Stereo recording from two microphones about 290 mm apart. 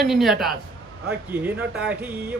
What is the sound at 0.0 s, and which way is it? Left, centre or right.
Speech, centre.